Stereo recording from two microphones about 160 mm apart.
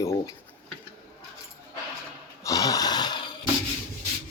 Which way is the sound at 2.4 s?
20° left (ahead or behind).